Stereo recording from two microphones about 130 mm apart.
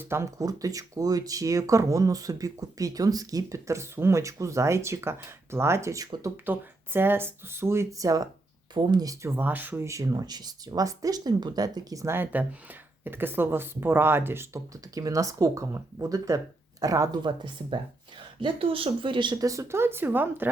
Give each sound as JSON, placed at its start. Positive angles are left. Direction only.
{"t": 0.0, "sound": "speech", "side_deg": -20}
{"t": 6.4, "sound": "speech", "side_deg": -15}